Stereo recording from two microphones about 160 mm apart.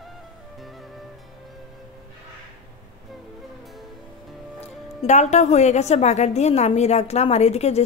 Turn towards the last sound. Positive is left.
turn(degrees=40)  # may be behind; listen again after turning